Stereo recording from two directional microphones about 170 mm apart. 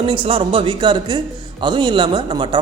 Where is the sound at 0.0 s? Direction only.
30° right (ahead or behind).